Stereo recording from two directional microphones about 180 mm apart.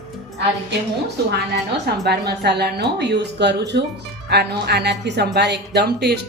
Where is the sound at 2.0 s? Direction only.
65° right (ahead or behind).